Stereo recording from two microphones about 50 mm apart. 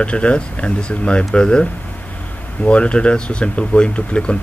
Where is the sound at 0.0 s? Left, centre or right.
Left.